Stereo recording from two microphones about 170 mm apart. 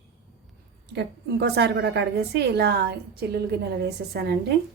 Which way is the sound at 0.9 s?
80° right.